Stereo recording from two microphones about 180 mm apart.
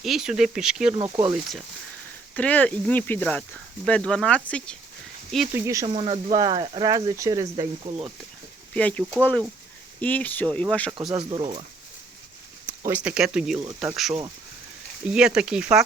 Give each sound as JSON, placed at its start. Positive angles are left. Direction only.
{"t": 0.0, "sound": "speech", "side_deg": 0}
{"t": 0.9, "sound": "speech", "side_deg": -25}
{"t": 2.3, "sound": "speech", "side_deg": 10}
{"t": 5.5, "sound": "speech", "side_deg": -15}
{"t": 5.8, "sound": "speech", "side_deg": -30}
{"t": 8.7, "sound": "speech", "side_deg": 5}
{"t": 11.1, "sound": "speech", "side_deg": -30}
{"t": 12.6, "sound": "speech", "side_deg": -10}
{"t": 15.0, "sound": "speech", "side_deg": -5}